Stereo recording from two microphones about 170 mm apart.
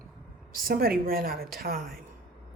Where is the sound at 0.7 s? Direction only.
60° right (ahead or behind).